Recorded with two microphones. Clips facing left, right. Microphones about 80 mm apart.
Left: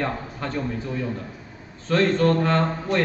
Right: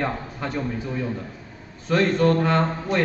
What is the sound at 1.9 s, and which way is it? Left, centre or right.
A man's voice, centre.